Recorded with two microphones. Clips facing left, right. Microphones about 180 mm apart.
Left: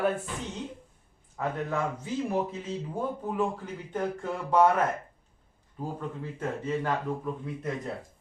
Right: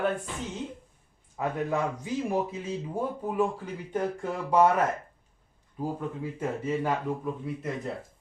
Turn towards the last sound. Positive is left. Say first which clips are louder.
# right 1 dB
turn(degrees=-5)  # may be behind; listen again after turning